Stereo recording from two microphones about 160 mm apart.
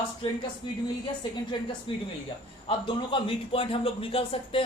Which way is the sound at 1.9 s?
30° left (ahead or behind).